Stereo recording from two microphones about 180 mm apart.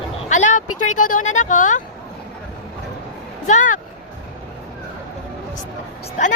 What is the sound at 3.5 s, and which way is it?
Speech, 45° left (ahead or behind).